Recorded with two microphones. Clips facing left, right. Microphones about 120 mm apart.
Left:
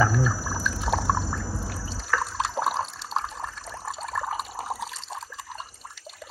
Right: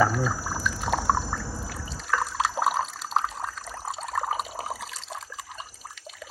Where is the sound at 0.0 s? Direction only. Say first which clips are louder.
Even; centre (ahead or behind).